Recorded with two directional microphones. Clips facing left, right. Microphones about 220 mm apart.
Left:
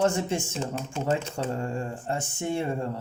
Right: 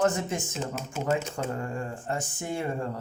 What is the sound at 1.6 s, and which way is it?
A man's voice, 25° left (ahead or behind).